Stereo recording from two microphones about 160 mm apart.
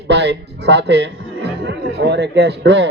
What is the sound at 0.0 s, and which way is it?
A man's voice, 90° right.